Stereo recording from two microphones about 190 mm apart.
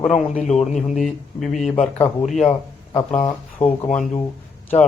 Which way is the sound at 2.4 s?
25° left (ahead or behind).